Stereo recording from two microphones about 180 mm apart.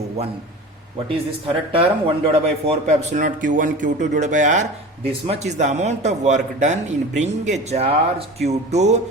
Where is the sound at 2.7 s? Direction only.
40° right (ahead or behind).